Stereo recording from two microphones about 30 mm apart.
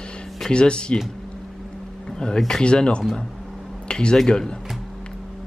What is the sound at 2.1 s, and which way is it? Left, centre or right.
Speech, left.